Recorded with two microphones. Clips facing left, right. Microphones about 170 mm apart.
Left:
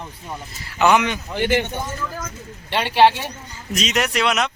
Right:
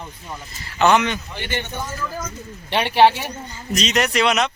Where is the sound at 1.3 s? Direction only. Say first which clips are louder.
Left 8 dB; 90° left.